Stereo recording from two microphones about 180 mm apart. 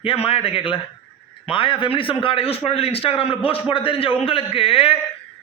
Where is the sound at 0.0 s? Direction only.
30° left (ahead or behind).